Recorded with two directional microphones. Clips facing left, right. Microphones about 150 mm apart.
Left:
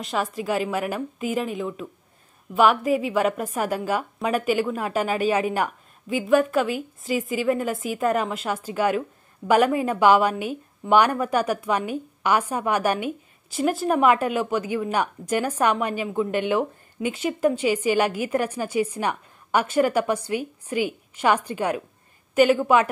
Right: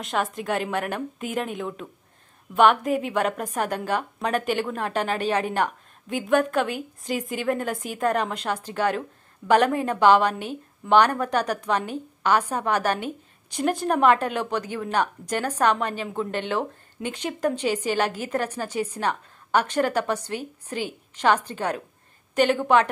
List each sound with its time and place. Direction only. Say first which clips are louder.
0.0 s a woman's voice: even; centre (ahead or behind)